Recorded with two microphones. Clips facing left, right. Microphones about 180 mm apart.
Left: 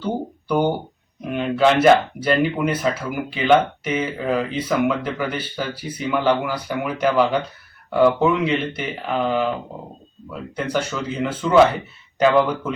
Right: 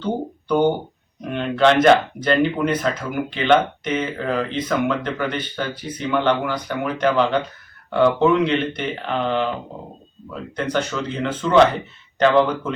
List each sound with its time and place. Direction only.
0.0 s speech: 10° left (ahead or behind)